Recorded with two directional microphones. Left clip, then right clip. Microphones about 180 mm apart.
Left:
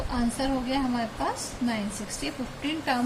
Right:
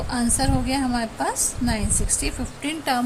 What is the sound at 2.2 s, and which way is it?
Speech, 55° right (ahead or behind).